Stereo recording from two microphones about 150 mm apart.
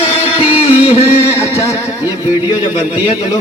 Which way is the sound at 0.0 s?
45° left (ahead or behind).